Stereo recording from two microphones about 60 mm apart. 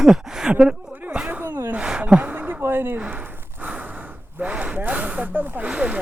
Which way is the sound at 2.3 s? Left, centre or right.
Right.